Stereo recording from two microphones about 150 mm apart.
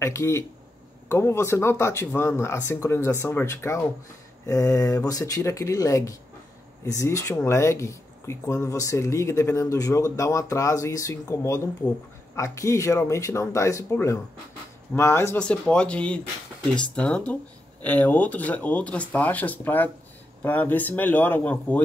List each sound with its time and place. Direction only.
0.0 s speech: 20° left (ahead or behind)
15.3 s speech: 5° left (ahead or behind)